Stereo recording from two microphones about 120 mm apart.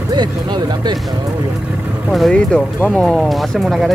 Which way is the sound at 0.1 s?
35° right (ahead or behind).